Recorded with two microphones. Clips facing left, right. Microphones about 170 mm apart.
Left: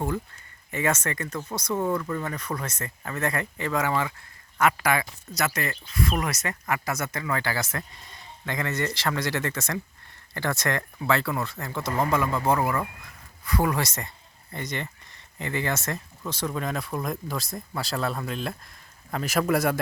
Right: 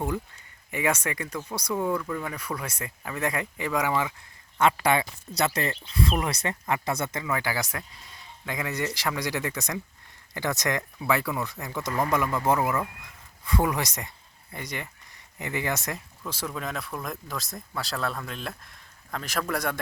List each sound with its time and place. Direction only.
0.7 s speech: 15° right (ahead or behind)
4.6 s speech: 30° right (ahead or behind)
7.3 s speech: 10° right (ahead or behind)
12.5 s speech: centre (ahead or behind)
13.4 s speech: 20° right (ahead or behind); by 19.8 s 5° left (ahead or behind)